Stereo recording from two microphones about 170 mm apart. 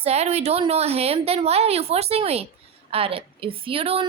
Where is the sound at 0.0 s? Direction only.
40° right (ahead or behind).